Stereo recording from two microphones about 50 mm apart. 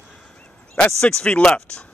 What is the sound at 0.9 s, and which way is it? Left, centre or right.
Speech, centre.